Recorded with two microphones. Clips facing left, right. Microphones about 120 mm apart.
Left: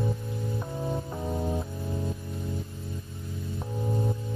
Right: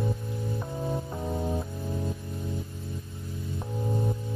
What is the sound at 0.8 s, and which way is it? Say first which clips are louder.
Music: even; centre (ahead or behind).